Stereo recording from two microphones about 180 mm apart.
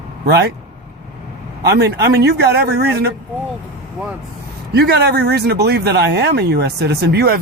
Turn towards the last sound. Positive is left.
turn(degrees=-60)  # may be behind; listen again after turning